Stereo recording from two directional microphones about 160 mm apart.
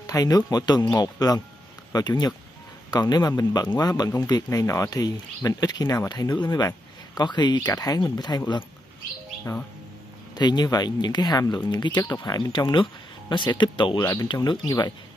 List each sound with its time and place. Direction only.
0.0 s speech: 20° left (ahead or behind)